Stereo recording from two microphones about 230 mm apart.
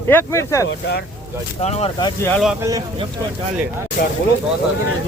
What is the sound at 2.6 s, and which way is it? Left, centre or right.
Speech, centre.